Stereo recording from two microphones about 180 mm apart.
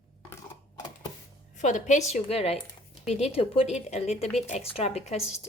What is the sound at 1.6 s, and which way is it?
Speech, 40° left (ahead or behind).